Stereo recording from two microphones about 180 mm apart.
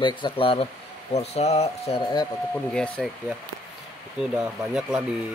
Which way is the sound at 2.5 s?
5° left (ahead or behind).